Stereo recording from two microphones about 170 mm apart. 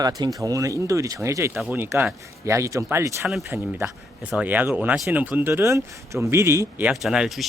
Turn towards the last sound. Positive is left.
turn(degrees=0)  # may be behind; listen again after turning